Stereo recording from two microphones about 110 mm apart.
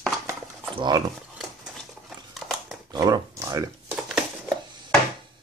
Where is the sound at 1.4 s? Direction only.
Centre (ahead or behind).